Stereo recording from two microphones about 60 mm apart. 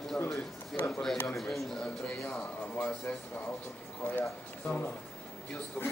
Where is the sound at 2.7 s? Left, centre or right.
Left.